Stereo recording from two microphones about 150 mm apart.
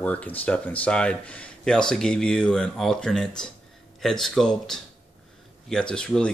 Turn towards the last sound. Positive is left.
turn(degrees=5)  # may be behind; listen again after turning